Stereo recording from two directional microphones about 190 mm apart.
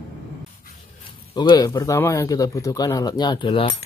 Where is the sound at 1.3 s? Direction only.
20° left (ahead or behind).